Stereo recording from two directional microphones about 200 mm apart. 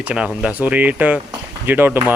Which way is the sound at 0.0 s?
5° right (ahead or behind).